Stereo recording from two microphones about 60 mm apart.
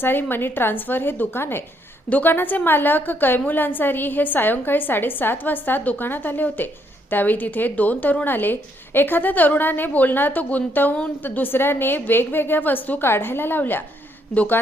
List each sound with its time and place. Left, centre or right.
0.0 s a woman's voice: left